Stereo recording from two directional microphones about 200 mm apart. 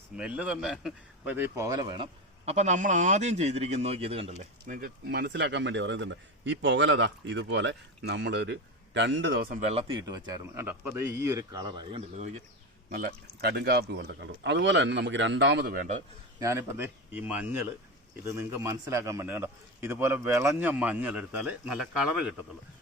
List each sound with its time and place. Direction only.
0.2 s a man's voice: 5° right (ahead or behind); by 2.0 s 20° right (ahead or behind)
2.5 s a man's voice: 35° right (ahead or behind)
9.8 s a man's voice: 20° right (ahead or behind)
12.9 s a man's voice: 50° right (ahead or behind)
16.4 s a man's voice: 15° right (ahead or behind)